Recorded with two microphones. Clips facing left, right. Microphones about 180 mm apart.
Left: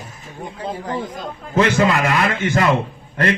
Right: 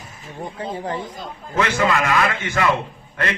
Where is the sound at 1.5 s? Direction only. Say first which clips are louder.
Left 4 dB; 30° left (ahead or behind).